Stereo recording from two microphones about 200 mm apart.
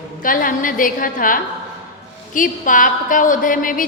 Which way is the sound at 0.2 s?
45° left (ahead or behind).